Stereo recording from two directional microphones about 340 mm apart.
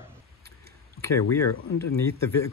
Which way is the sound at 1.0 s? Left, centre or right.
Centre.